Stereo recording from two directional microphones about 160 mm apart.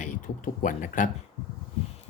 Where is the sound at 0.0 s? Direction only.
55° left (ahead or behind).